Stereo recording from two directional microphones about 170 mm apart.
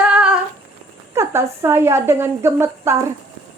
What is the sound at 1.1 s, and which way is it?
Speech, 15° right (ahead or behind).